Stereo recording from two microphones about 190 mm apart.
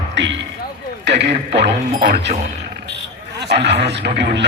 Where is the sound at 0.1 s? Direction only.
70° right (ahead or behind).